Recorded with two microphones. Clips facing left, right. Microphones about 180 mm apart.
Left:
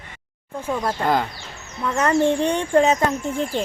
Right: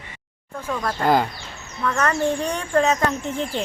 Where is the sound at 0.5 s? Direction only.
20° left (ahead or behind).